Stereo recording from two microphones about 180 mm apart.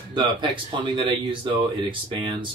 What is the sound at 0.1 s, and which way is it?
Speech, 25° right (ahead or behind).